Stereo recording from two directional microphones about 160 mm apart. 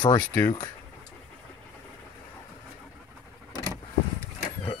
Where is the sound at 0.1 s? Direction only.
15° left (ahead or behind).